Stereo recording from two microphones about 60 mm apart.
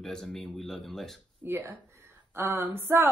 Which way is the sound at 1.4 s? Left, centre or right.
Right.